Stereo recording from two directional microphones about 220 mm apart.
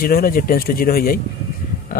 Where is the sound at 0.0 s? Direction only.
40° left (ahead or behind).